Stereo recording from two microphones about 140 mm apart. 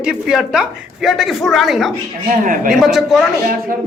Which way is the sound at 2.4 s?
75° right (ahead or behind).